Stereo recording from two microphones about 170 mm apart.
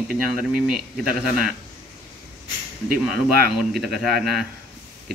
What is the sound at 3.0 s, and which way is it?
Speech, centre (ahead or behind).